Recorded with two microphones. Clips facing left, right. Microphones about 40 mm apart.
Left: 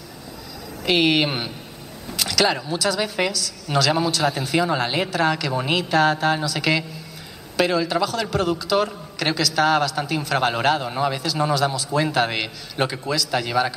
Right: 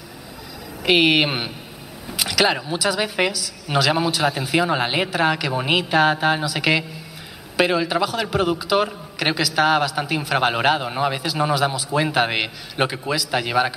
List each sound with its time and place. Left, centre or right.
0.8 s a man's voice: centre